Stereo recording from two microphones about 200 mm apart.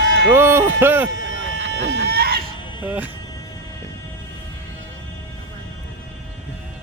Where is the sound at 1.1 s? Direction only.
65° right (ahead or behind).